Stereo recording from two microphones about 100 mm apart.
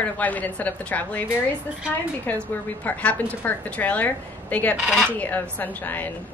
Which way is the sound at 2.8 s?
15° left (ahead or behind).